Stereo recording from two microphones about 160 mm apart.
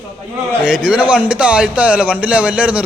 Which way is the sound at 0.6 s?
5° right (ahead or behind).